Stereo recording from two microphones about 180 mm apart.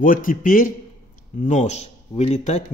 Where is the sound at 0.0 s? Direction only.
50° left (ahead or behind).